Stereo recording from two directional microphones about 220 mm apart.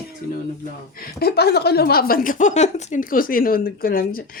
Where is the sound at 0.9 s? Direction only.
45° left (ahead or behind).